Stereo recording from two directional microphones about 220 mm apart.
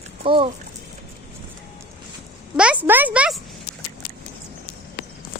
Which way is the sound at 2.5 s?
5° right (ahead or behind).